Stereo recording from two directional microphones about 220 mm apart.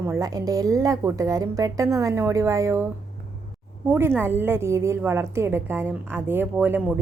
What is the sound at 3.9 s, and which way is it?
A woman's voice, 10° right (ahead or behind).